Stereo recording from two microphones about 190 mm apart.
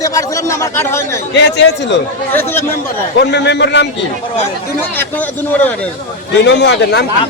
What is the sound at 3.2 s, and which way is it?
Speech, 65° left (ahead or behind).